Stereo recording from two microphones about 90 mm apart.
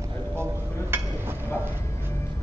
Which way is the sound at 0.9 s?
25° right (ahead or behind).